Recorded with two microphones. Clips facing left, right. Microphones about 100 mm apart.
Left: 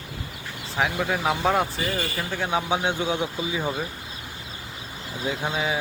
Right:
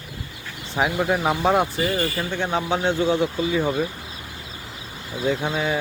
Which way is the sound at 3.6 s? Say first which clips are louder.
Right 5 dB; centre (ahead or behind).